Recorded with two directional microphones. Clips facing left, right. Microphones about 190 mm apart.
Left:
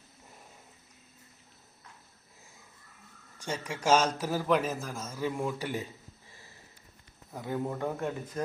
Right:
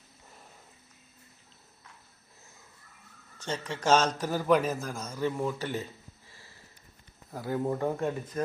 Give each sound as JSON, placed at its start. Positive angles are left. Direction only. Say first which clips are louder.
{"t": 3.3, "sound": "a man's voice", "louder": "right 1 dB", "side_deg": 10}
{"t": 7.3, "sound": "a man's voice", "louder": "right 3 dB", "side_deg": -5}